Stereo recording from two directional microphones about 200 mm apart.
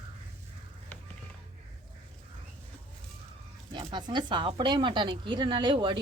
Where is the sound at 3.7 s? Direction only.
25° right (ahead or behind).